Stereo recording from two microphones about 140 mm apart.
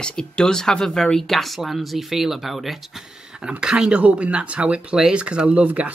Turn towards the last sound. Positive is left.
turn(degrees=-10)  # may be behind; listen again after turning